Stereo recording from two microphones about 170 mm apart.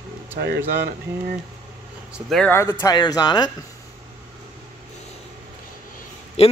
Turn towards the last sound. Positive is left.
turn(degrees=35)  # may be behind; listen again after turning